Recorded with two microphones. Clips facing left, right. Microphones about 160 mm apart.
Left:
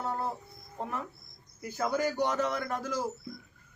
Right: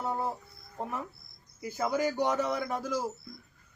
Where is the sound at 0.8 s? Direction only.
10° right (ahead or behind).